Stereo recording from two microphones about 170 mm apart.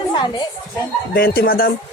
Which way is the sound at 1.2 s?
65° left (ahead or behind).